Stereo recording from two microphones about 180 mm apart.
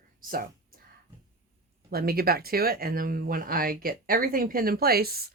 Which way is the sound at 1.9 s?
55° right (ahead or behind).